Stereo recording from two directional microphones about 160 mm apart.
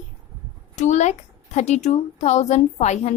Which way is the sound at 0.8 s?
45° left (ahead or behind).